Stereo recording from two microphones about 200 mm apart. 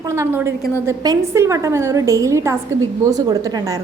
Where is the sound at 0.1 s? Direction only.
15° right (ahead or behind).